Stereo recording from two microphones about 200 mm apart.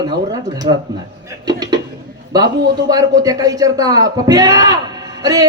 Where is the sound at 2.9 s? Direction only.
15° right (ahead or behind).